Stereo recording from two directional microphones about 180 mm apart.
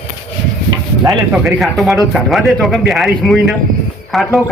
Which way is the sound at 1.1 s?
Centre (ahead or behind).